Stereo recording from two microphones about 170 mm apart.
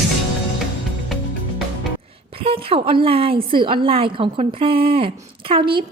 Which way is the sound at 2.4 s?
35° right (ahead or behind).